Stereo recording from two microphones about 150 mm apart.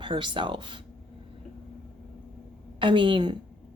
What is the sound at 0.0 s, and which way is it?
Speech, 30° right (ahead or behind).